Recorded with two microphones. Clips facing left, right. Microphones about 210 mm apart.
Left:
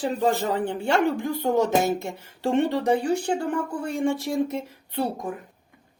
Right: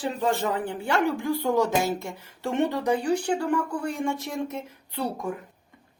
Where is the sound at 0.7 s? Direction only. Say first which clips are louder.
Left 4 dB; 25° left (ahead or behind).